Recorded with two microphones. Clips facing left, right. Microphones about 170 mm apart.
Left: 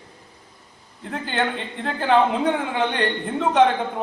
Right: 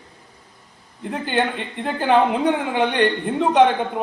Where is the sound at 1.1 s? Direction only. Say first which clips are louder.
Right 3 dB; 15° right (ahead or behind).